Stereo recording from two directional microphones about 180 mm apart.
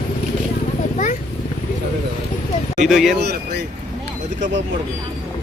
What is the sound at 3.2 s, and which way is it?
Speech, 65° right (ahead or behind).